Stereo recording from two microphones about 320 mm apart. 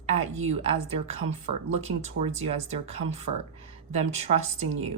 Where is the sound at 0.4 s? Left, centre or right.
Centre.